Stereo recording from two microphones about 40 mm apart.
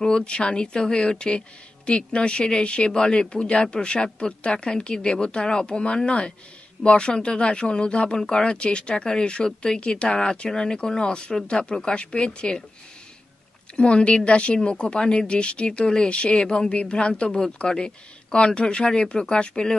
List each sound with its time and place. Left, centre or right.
0.0 s speech: left
13.7 s speech: left